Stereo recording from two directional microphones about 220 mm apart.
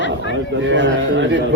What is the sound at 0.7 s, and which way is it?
Speech, 55° right (ahead or behind).